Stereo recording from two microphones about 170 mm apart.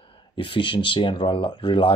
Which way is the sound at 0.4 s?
30° left (ahead or behind).